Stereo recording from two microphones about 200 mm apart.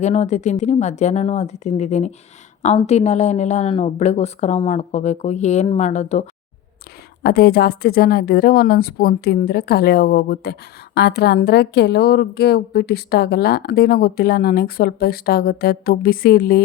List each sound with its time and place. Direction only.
0.0 s speech: 35° left (ahead or behind)
7.2 s a woman's voice: 50° left (ahead or behind)